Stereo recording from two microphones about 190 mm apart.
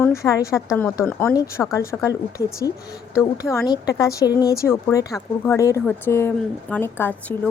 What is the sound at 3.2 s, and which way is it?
A woman's voice, 15° left (ahead or behind).